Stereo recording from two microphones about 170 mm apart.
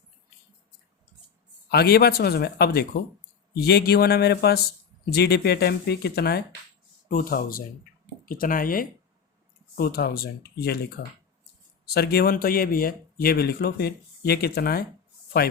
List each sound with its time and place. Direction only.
1.7 s speech: 70° left (ahead or behind)
7.1 s a man's voice: 55° left (ahead or behind)